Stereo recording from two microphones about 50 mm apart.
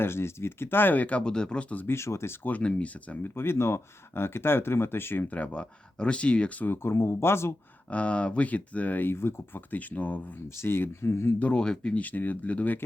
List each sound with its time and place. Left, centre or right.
0.0 s speech: left
1.2 s speech: centre
1.9 s speech: left
2.6 s speech: left
3.2 s speech: left
5.3 s speech: left
6.7 s speech: left
7.9 s speech: left
9.1 s speech: left
9.7 s speech: left
10.6 s speech: left
11.5 s speech: centre
12.0 s speech: left